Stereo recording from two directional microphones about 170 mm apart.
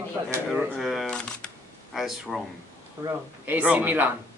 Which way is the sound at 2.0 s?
Centre (ahead or behind).